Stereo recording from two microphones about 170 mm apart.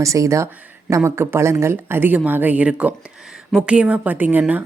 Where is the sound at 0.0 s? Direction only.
20° right (ahead or behind).